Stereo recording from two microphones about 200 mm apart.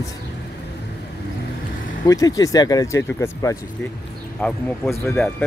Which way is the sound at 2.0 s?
15° left (ahead or behind).